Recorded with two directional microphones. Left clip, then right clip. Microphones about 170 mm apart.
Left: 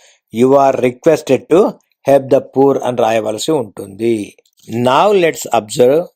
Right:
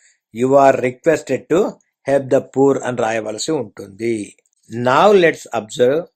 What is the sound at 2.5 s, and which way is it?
Speech, 15° left (ahead or behind).